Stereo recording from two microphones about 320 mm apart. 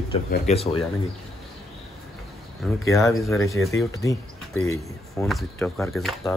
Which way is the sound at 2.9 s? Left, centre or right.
Centre.